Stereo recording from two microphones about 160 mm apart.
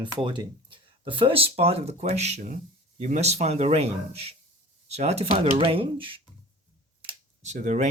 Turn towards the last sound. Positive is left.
turn(degrees=-45)  # may be behind; listen again after turning